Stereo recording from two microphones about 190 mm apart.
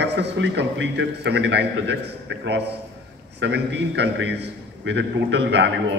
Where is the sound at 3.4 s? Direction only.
65° right (ahead or behind).